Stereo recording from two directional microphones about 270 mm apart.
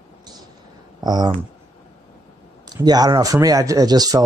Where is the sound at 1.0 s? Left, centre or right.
Centre.